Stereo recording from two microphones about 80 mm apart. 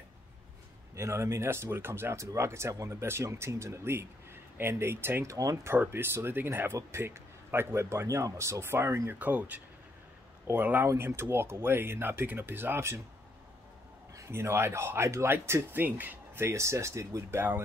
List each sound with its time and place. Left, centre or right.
0.9 s speech: right
5.3 s speech: right
5.8 s speech: right
14.1 s speech: right